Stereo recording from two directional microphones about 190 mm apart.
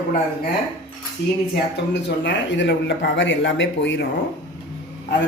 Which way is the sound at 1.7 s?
65° left (ahead or behind).